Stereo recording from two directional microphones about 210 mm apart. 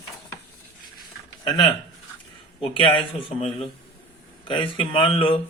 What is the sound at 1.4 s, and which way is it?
Speech, 20° left (ahead or behind).